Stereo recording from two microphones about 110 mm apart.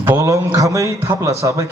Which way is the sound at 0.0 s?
25° right (ahead or behind).